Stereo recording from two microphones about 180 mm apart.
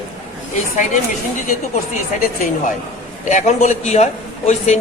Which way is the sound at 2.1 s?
45° left (ahead or behind).